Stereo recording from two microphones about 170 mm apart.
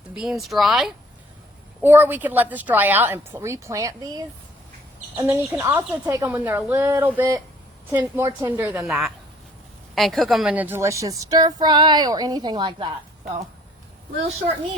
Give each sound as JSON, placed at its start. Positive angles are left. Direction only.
{"t": 0.1, "sound": "a woman's voice", "side_deg": -5}
{"t": 8.9, "sound": "a woman's voice", "side_deg": 0}